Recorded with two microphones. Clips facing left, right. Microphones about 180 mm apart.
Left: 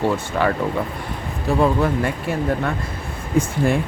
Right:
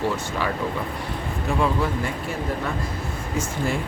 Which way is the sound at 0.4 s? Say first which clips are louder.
Left 8 dB; 55° left (ahead or behind).